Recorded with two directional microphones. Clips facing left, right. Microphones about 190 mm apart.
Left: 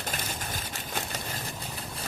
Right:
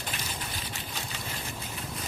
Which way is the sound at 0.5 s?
45° left (ahead or behind).